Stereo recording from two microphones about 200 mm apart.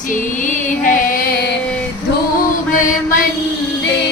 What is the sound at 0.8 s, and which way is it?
Female singing, 40° left (ahead or behind).